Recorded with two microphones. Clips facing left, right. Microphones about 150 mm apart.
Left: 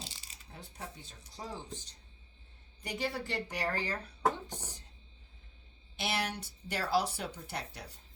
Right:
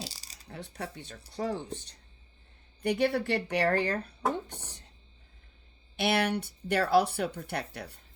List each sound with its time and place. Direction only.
0.0 s a sound: 35° right (ahead or behind)
0.4 s speech: 70° right (ahead or behind)
6.0 s speech: 60° right (ahead or behind)